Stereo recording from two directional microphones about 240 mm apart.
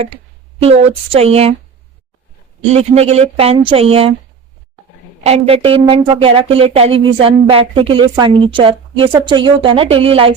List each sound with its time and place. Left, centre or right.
0.6 s speech: right
2.7 s speech: right
5.2 s speech: right